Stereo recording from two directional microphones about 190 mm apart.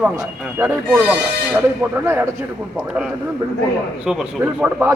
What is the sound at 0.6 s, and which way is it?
Speech, 10° right (ahead or behind).